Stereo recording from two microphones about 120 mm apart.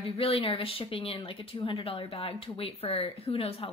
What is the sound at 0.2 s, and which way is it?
A woman's voice, 50° left (ahead or behind).